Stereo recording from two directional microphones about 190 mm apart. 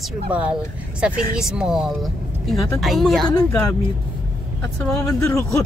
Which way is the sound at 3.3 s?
20° left (ahead or behind).